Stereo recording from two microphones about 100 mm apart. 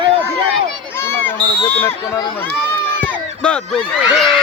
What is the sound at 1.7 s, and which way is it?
Speech, 20° left (ahead or behind).